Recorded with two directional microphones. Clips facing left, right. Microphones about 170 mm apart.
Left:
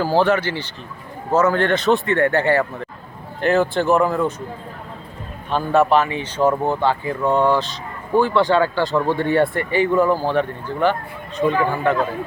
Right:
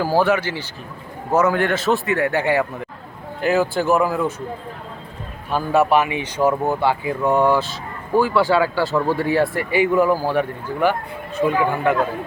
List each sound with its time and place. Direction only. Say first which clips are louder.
0.0 s speech: left 1 dB; 10° right (ahead or behind)
5.5 s speech: left 1 dB; 10° right (ahead or behind)